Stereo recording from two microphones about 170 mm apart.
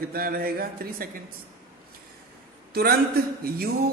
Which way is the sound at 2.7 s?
65° right (ahead or behind).